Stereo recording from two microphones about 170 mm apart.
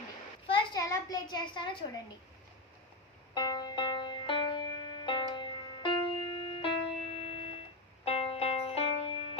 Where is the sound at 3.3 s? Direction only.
25° left (ahead or behind).